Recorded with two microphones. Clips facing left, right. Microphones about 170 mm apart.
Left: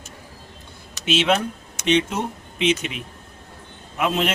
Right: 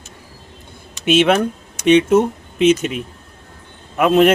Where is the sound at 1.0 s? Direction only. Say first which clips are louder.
Right 6 dB; 55° right (ahead or behind).